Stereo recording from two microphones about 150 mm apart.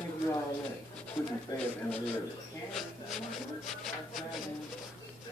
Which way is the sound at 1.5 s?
20° left (ahead or behind).